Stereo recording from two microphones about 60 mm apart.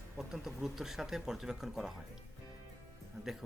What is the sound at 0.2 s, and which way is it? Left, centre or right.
Speech, centre.